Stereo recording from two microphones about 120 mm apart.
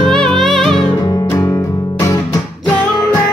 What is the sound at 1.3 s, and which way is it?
Music, 25° left (ahead or behind).